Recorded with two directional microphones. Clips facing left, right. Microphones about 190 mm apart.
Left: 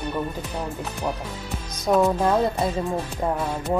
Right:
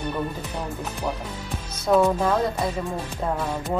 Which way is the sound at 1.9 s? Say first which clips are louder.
Even; 10° left (ahead or behind).